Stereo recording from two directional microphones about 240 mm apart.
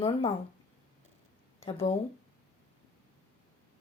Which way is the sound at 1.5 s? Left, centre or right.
Centre.